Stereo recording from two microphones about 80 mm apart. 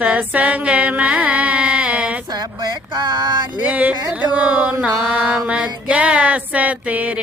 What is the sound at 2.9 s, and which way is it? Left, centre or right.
Speech, right.